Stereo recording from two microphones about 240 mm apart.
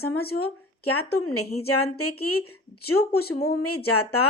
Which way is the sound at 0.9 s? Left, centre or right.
Left.